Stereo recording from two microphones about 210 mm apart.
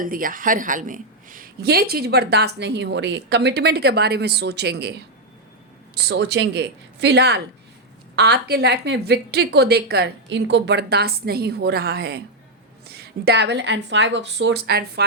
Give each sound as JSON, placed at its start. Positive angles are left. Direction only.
{"t": 0.0, "sound": "a woman's voice", "side_deg": -40}